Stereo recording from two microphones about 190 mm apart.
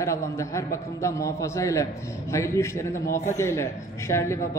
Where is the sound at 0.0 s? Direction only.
15° left (ahead or behind).